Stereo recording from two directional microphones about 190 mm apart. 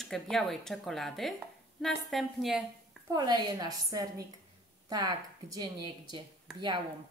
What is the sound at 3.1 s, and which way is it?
A woman's voice, 20° right (ahead or behind).